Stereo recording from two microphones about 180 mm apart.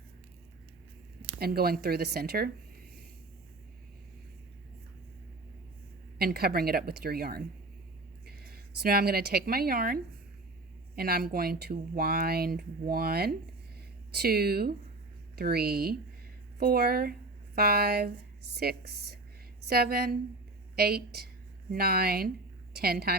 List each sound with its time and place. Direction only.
1.4 s speech: 60° right (ahead or behind)
6.1 s a woman's voice: 60° right (ahead or behind)